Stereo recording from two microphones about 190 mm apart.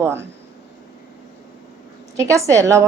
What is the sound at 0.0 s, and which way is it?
Speech, 10° right (ahead or behind).